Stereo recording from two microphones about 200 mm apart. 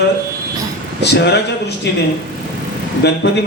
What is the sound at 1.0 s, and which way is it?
Speech, 55° left (ahead or behind).